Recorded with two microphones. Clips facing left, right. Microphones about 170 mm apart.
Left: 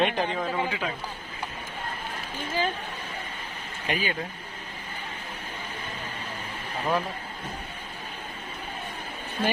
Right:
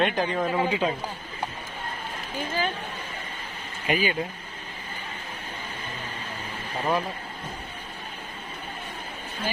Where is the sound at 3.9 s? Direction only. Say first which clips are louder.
Right 4 dB; 5° right (ahead or behind).